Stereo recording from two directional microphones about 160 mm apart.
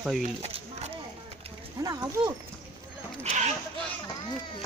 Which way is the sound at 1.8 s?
25° right (ahead or behind).